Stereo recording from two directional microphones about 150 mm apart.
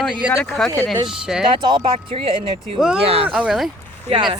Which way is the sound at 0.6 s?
5° left (ahead or behind).